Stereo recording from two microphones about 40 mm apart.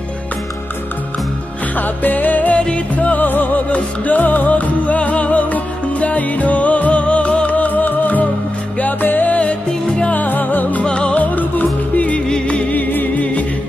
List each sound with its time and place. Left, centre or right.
1.8 s music: left
2.5 s music: left
3.1 s music: left
9.4 s music: left
10.1 s music: left
10.8 s music: left
11.1 s music: left
12.3 s music: left
12.7 s music: left